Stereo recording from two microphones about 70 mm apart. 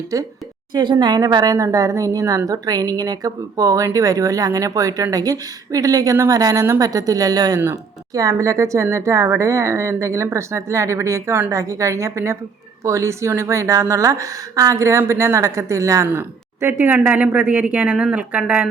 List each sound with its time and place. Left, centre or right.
0.1 s speech: right
0.7 s speech: right
1.5 s speech: right
8.1 s a woman's voice: right
16.6 s speech: right